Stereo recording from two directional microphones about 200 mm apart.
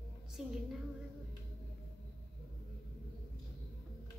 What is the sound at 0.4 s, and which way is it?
Speech, 5° right (ahead or behind).